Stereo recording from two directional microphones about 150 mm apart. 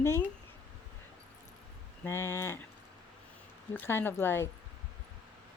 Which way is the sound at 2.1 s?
15° left (ahead or behind).